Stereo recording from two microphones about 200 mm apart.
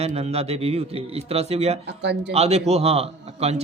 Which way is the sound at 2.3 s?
30° right (ahead or behind).